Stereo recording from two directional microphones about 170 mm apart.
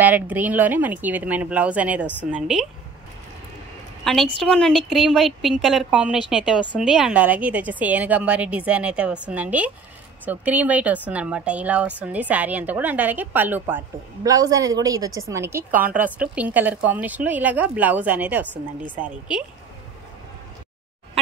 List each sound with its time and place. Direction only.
0.0 s a woman's voice: 10° right (ahead or behind)
4.0 s a woman's voice: centre (ahead or behind)